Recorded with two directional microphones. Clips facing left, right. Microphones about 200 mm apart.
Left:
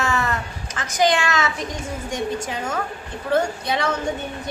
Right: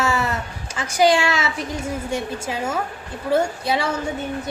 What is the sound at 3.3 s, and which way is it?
Speech, 10° right (ahead or behind).